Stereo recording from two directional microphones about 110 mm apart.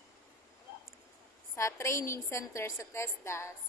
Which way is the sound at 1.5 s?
25° left (ahead or behind).